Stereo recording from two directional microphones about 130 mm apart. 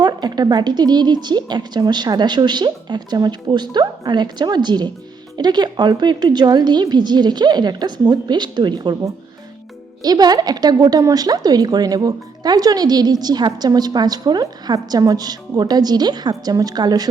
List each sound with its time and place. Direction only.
0.0 s a woman's voice: 30° right (ahead or behind)
10.0 s a woman's voice: 30° right (ahead or behind)